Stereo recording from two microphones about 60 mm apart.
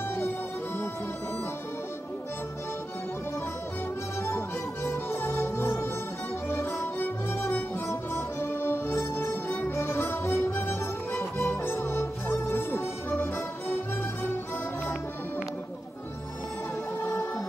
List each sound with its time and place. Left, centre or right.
4.2 s music: left
7.3 s music: left